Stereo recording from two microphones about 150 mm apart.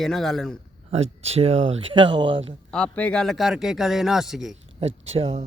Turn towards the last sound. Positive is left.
turn(degrees=-45)  # may be behind; listen again after turning